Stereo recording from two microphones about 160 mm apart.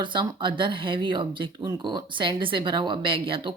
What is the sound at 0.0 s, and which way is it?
Speech, 30° right (ahead or behind).